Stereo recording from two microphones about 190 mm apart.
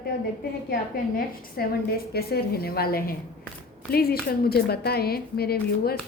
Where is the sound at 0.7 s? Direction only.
50° left (ahead or behind).